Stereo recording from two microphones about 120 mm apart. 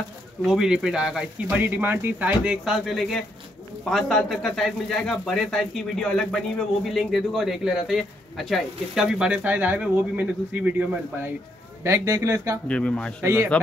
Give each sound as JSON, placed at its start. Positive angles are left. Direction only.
{"t": 0.5, "sound": "speech", "side_deg": -5}
{"t": 11.8, "sound": "a man's voice", "side_deg": -25}
{"t": 12.6, "sound": "speech", "side_deg": 10}
{"t": 13.2, "sound": "a man's voice", "side_deg": -20}